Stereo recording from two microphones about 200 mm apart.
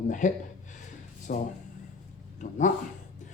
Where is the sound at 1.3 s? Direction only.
45° left (ahead or behind).